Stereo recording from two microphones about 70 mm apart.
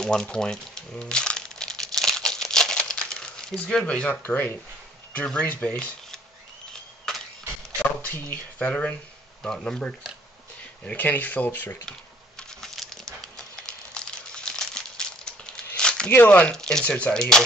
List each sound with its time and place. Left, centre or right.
0.0 s crumpling: centre
4.3 s speech: left
6.7 s a sound: centre
8.0 s speech: left
9.4 s speech: centre
10.9 s speech: left
12.4 s a sound: centre
16.3 s speech: left
16.5 s speech: centre
16.8 s speech: centre